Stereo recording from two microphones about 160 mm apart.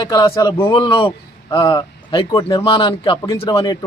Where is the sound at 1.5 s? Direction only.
20° left (ahead or behind).